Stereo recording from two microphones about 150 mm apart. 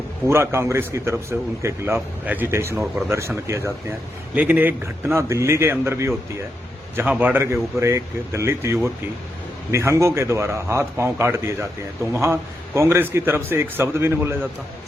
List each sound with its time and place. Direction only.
0.3 s a man's voice: 15° right (ahead or behind)